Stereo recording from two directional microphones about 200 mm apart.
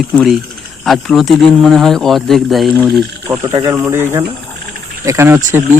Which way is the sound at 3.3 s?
15° right (ahead or behind).